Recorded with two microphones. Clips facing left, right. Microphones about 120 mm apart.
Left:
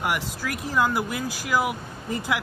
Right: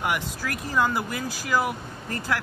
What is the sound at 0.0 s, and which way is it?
Speech, 5° left (ahead or behind).